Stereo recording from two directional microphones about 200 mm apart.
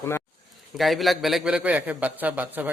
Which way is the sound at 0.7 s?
Centre (ahead or behind).